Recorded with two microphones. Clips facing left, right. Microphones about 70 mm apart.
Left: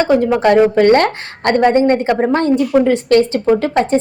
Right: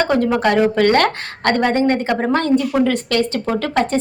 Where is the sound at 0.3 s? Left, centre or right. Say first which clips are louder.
Left 4 dB; left.